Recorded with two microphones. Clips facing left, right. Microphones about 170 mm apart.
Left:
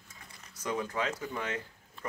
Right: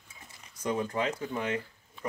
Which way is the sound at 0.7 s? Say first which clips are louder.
Right 2 dB; 25° right (ahead or behind).